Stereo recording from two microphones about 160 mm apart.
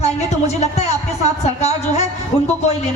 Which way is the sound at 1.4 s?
45° left (ahead or behind).